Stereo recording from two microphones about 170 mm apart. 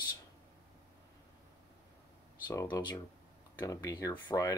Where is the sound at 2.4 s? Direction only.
25° left (ahead or behind).